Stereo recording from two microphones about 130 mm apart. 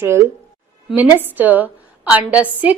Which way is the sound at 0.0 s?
20° right (ahead or behind).